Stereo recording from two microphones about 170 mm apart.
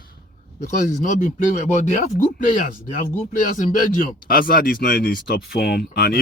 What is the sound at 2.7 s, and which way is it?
Speech, 55° left (ahead or behind).